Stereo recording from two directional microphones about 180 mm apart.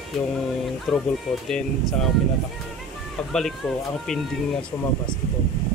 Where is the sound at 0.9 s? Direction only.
Centre (ahead or behind).